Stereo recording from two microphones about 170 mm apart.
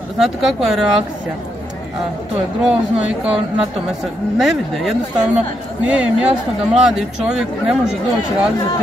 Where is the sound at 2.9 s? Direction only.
35° right (ahead or behind).